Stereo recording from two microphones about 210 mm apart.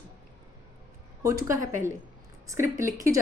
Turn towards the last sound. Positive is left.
turn(degrees=-15)  # may be behind; listen again after turning